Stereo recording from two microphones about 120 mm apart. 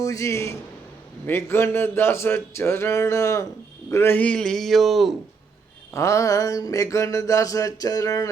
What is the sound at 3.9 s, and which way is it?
A man's voice, 20° left (ahead or behind).